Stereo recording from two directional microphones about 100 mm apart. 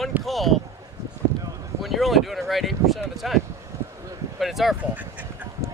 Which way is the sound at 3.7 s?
30° right (ahead or behind).